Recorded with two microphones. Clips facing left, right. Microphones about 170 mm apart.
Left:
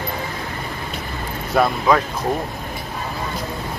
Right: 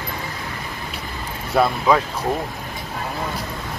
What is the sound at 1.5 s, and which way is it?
Speech, 5° right (ahead or behind).